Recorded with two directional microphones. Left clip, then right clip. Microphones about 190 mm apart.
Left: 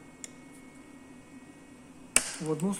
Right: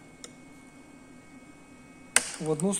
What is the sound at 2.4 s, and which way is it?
Speech, 40° right (ahead or behind).